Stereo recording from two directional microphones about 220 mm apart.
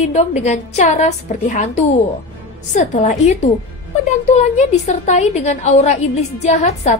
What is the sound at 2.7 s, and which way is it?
Speech, 35° left (ahead or behind).